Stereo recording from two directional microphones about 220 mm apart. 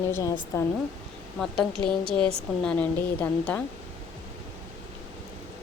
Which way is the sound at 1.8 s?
5° left (ahead or behind).